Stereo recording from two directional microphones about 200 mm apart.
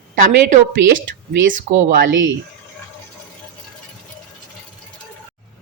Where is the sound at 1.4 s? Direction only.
45° right (ahead or behind).